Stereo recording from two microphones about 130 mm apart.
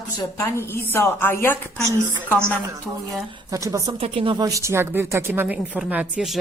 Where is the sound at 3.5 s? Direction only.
25° right (ahead or behind).